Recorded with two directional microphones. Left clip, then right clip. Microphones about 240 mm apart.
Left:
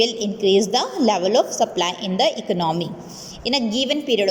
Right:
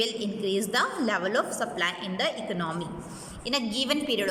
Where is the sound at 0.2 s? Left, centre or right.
Centre.